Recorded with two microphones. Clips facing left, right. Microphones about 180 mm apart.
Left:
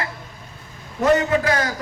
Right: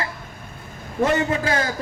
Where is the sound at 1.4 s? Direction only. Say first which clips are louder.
Left 1 dB; 30° right (ahead or behind).